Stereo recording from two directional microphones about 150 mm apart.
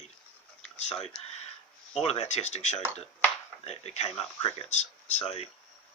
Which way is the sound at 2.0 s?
45° left (ahead or behind).